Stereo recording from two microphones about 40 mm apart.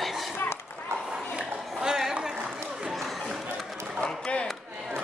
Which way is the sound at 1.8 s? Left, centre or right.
Centre.